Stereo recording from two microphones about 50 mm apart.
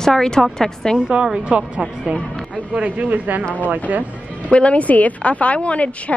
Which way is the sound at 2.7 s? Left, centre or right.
Right.